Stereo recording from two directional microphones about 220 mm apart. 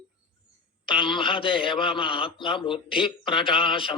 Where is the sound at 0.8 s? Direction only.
20° left (ahead or behind).